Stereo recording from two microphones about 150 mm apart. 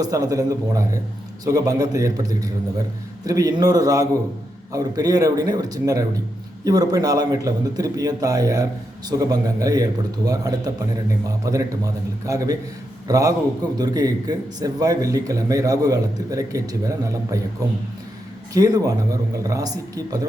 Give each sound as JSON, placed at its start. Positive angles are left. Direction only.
{"t": 0.0, "sound": "a man's voice", "side_deg": -25}
{"t": 18.5, "sound": "speech", "side_deg": -25}